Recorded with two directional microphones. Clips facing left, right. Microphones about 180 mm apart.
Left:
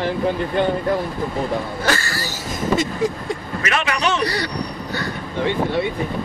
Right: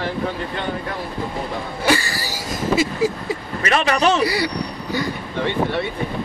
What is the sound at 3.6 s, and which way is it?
Speech, 35° right (ahead or behind).